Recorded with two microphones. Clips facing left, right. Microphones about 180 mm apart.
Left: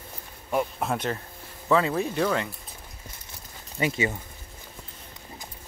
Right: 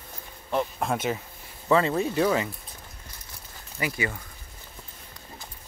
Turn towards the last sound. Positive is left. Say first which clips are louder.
# left 3 dB
turn(degrees=25)  # may be behind; listen again after turning